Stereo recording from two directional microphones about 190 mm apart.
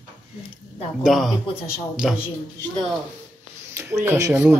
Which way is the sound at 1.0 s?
Centre (ahead or behind).